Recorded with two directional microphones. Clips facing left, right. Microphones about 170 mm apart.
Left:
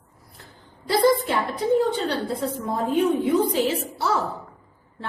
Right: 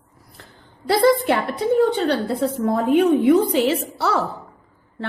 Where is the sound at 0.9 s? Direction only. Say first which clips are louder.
Right 3 dB; 70° right (ahead or behind).